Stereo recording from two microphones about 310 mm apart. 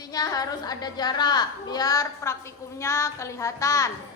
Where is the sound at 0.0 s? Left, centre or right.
Centre.